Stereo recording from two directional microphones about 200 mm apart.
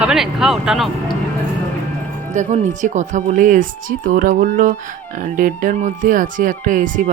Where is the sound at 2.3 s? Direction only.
35° right (ahead or behind).